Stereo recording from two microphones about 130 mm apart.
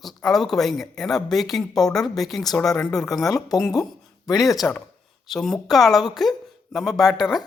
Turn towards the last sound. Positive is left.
turn(degrees=0)  # may be behind; listen again after turning